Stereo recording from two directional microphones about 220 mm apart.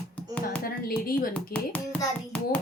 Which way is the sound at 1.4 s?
5° left (ahead or behind).